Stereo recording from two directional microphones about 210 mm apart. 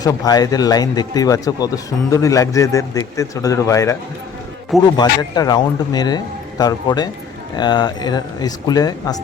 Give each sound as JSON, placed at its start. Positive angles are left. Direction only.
{"t": 0.0, "sound": "speech", "side_deg": 15}
{"t": 4.9, "sound": "a man's voice", "side_deg": 20}